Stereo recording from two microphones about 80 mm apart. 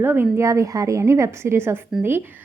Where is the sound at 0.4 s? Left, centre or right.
Right.